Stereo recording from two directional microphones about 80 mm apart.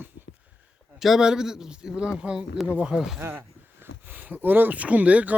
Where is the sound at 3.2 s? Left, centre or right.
Right.